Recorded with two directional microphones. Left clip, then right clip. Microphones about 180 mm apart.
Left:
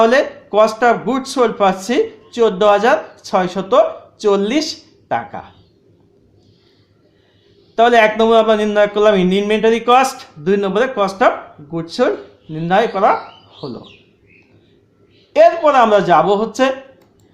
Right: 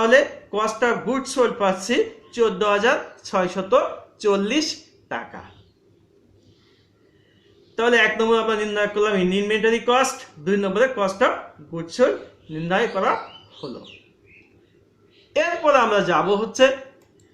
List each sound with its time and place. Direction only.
0.0 s speech: 50° left (ahead or behind)
7.8 s speech: 45° left (ahead or behind)
15.3 s speech: 45° left (ahead or behind)